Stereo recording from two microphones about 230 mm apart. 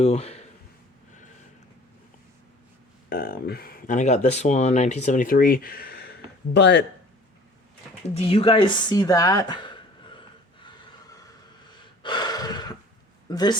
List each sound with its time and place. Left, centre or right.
0.0 s speech: left
3.1 s speech: left
8.1 s a sound: left
11.7 s gasp: centre
13.2 s speech: centre